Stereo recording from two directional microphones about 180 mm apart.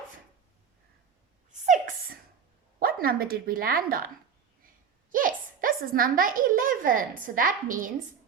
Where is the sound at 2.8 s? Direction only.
55° right (ahead or behind).